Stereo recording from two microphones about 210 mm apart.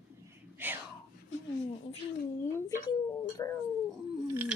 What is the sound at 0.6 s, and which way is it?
Speech, 10° right (ahead or behind).